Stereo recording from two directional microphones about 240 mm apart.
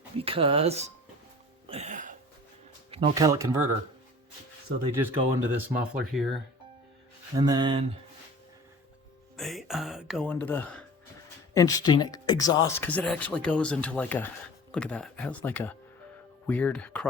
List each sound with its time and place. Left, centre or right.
0.2 s speech: right
1.7 s music: right
2.9 s speech: centre
4.8 s speech: centre
7.3 s speech: centre
9.3 s speech: centre